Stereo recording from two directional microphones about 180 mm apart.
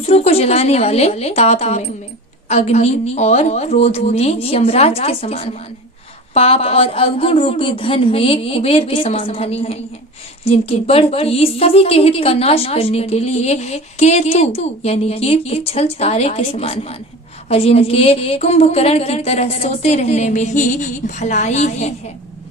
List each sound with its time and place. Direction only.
0.0 s a woman's voice: 35° left (ahead or behind)